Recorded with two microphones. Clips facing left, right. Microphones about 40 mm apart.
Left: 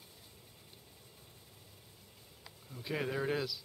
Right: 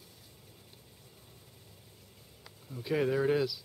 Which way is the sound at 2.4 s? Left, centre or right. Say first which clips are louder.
Right 6 dB; centre.